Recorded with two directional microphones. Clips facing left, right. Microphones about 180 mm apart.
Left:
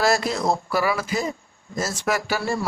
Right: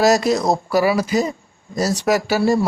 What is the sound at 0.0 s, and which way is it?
Speech, 40° right (ahead or behind).